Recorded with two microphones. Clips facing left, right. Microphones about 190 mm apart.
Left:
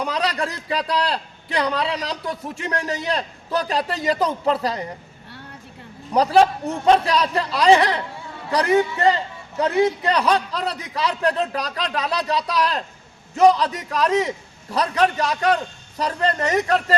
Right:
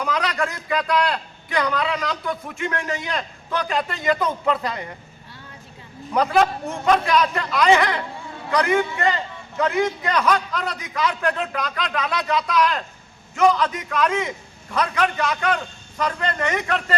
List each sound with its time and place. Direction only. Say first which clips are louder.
0.0 s a man's voice: even; 30° left (ahead or behind)
6.1 s a man's voice: left 3 dB; 35° left (ahead or behind)